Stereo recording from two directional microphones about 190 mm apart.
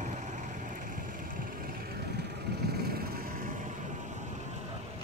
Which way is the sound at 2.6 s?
55° right (ahead or behind).